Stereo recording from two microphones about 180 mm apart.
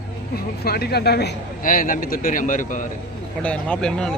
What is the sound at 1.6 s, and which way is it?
Speech, 50° left (ahead or behind).